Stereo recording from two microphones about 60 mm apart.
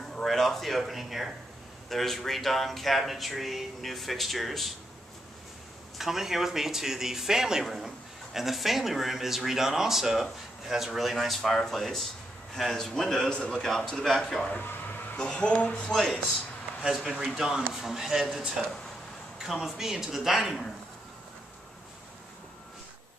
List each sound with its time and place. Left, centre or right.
0.1 s speech: centre
5.9 s a man's voice: centre
14.5 s a sound: left
15.1 s a man's voice: centre
15.9 s speech: centre